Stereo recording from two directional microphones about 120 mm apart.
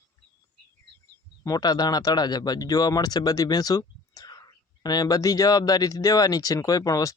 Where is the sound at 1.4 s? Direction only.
35° left (ahead or behind).